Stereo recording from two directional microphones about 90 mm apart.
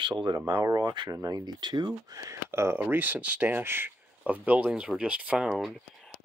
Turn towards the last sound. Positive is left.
turn(degrees=-5)  # may be behind; listen again after turning